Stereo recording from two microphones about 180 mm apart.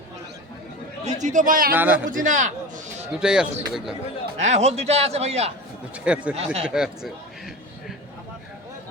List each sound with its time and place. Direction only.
1.0 s a man's voice: 45° right (ahead or behind)
1.7 s speech: 10° right (ahead or behind)
2.0 s a sound: 45° right (ahead or behind)
3.1 s speech: 5° right (ahead or behind)
4.4 s a man's voice: 40° right (ahead or behind)
5.9 s speech: 5° right (ahead or behind)
6.3 s a man's voice: 35° right (ahead or behind)
6.6 s a man's voice: 5° right (ahead or behind)